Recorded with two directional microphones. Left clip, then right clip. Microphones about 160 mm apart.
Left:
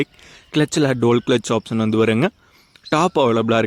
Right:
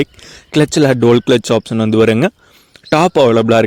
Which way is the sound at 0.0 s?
30° right (ahead or behind).